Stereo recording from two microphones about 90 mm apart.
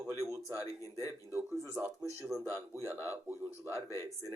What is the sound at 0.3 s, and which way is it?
Speech, 35° left (ahead or behind).